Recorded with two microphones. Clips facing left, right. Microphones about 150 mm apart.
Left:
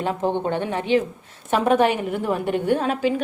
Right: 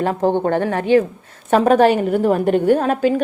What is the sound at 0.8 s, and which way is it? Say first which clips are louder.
A woman's voice: right 6 dB; 50° right (ahead or behind).